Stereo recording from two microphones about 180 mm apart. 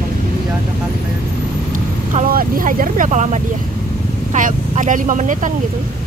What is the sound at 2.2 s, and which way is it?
Speech, 50° right (ahead or behind).